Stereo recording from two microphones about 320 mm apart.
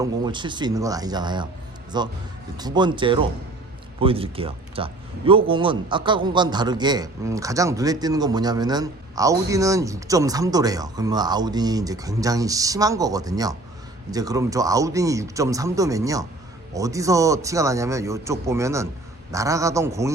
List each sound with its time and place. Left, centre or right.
0.0 s a man's voice: centre